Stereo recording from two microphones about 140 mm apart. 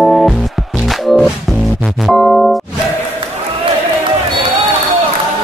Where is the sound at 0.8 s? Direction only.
Centre (ahead or behind).